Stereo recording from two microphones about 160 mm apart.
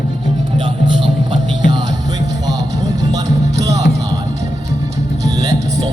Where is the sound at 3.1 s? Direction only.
20° right (ahead or behind).